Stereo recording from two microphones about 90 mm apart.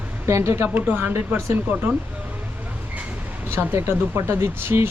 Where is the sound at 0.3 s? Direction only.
30° right (ahead or behind).